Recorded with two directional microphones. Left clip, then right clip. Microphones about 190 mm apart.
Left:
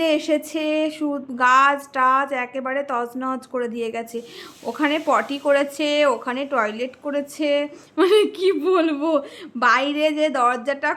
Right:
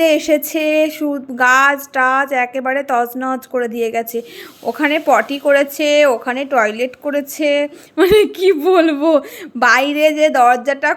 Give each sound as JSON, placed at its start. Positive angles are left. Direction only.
{"t": 0.0, "sound": "speech", "side_deg": -20}